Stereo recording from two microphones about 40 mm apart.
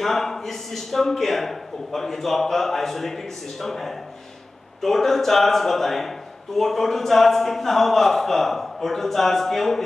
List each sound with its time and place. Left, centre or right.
0.0 s a man's voice: centre